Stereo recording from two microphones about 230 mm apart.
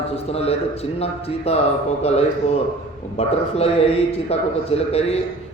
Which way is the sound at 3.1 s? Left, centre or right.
Left.